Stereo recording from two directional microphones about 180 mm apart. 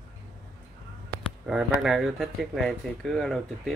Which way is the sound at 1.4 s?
5° right (ahead or behind).